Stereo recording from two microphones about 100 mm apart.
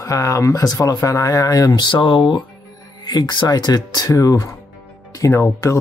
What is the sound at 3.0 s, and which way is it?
Speech, 45° left (ahead or behind).